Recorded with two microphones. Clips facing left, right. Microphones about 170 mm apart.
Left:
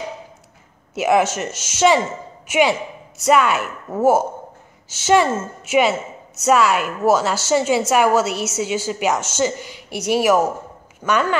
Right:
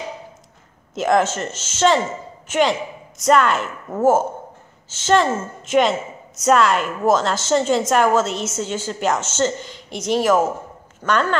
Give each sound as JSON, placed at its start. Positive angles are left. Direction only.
{"t": 0.9, "sound": "a woman's voice", "side_deg": 10}